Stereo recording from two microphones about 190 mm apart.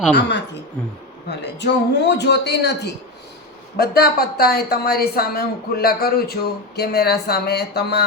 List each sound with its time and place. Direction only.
0.2 s speech: 70° left (ahead or behind)
1.5 s a woman's voice: 65° left (ahead or behind)